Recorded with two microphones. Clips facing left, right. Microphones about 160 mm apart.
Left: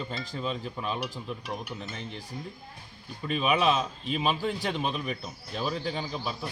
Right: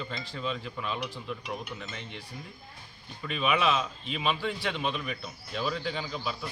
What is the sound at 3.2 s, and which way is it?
A man's voice, 40° left (ahead or behind).